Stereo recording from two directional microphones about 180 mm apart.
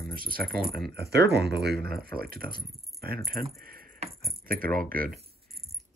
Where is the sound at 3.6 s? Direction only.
55° right (ahead or behind).